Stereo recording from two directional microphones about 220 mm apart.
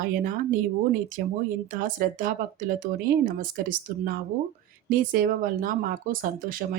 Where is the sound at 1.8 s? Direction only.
40° right (ahead or behind).